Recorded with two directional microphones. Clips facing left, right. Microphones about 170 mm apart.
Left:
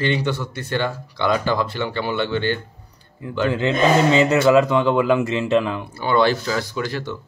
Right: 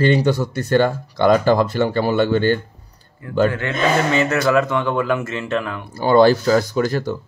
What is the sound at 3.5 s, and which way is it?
Speech, 20° left (ahead or behind).